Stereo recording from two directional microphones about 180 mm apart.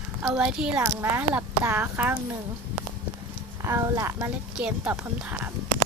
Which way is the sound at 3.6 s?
15° right (ahead or behind).